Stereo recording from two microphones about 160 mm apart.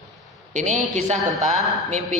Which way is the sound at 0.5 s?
50° right (ahead or behind).